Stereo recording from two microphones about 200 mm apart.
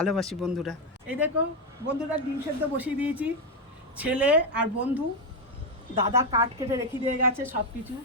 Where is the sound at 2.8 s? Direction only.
5° right (ahead or behind).